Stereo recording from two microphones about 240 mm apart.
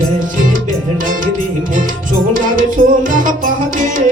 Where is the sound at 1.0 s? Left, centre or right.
Right.